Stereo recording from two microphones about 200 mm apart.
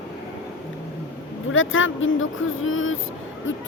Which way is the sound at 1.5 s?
80° left.